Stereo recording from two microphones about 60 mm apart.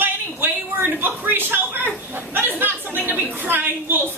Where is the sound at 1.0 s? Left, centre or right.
Right.